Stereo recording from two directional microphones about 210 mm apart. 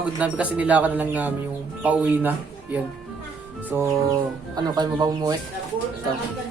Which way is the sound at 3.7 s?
10° right (ahead or behind).